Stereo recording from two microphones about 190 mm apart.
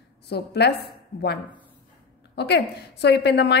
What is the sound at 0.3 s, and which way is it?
A woman's voice, 60° left (ahead or behind).